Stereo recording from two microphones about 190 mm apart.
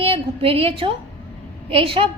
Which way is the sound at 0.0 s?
30° right (ahead or behind).